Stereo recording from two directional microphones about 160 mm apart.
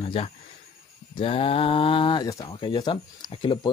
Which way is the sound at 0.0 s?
35° left (ahead or behind).